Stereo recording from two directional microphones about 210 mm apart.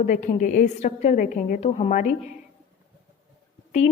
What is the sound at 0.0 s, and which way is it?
A woman's voice, 35° left (ahead or behind).